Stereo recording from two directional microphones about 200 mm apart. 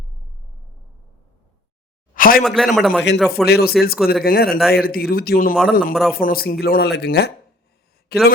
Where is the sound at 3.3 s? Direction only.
50° left (ahead or behind).